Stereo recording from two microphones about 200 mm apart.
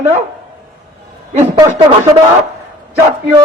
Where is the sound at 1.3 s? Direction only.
35° right (ahead or behind).